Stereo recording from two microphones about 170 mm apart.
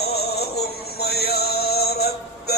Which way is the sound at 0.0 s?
70° left (ahead or behind).